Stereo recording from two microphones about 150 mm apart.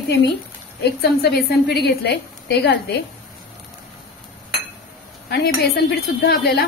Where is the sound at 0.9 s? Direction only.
90° left.